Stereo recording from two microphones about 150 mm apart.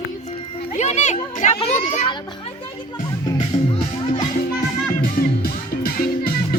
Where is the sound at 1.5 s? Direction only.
40° left (ahead or behind).